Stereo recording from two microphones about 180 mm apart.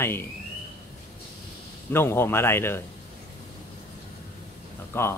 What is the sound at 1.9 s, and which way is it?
Speech, 15° left (ahead or behind).